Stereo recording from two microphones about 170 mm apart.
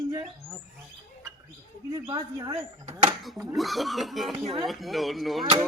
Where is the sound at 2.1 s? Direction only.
25° right (ahead or behind).